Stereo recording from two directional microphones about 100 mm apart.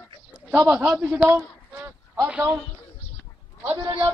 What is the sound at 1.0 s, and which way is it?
A man's voice, 15° right (ahead or behind).